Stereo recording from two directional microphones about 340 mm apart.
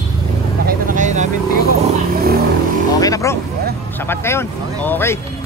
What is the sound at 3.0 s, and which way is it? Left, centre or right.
Vehicle, centre.